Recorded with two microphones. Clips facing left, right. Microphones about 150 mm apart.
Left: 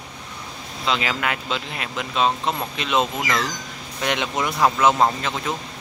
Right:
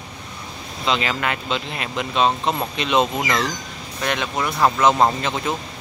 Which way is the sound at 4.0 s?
20° left (ahead or behind).